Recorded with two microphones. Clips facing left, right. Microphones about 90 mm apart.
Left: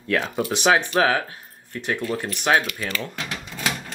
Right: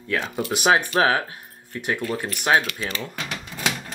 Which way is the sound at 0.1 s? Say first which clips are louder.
Left 2 dB; 5° right (ahead or behind).